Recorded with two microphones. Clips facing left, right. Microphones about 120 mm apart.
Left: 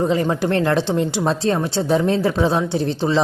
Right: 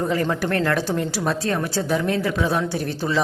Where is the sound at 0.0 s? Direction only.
20° left (ahead or behind).